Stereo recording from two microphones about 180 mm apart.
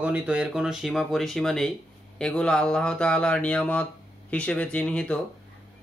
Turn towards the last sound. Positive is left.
turn(degrees=5)  # may be behind; listen again after turning